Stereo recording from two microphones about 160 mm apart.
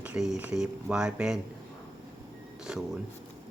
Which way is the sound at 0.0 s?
5° right (ahead or behind).